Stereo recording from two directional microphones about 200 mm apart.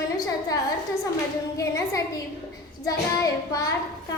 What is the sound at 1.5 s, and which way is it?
A woman's voice, 15° left (ahead or behind).